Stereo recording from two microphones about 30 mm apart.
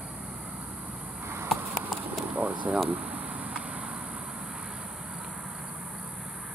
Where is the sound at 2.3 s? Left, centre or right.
Right.